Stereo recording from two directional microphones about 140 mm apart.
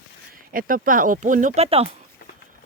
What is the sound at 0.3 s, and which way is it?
Speech, 80° right.